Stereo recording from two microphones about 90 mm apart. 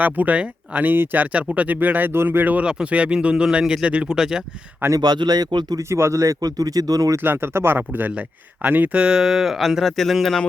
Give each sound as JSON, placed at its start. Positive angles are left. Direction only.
{"t": 0.0, "sound": "speech", "side_deg": -15}
{"t": 4.9, "sound": "speech", "side_deg": -50}
{"t": 5.9, "sound": "speech", "side_deg": -30}
{"t": 7.2, "sound": "speech", "side_deg": -25}